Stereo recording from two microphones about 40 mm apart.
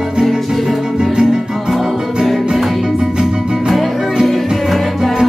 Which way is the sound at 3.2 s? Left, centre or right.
Centre.